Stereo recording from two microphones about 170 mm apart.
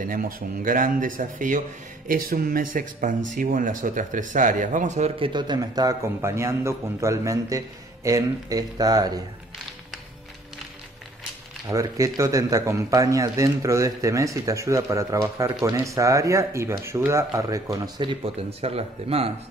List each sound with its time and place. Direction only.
0.0 s speech: 55° right (ahead or behind)
5.3 s a man's voice: 25° right (ahead or behind)
11.6 s a man's voice: 20° right (ahead or behind); by 19.3 s 35° right (ahead or behind)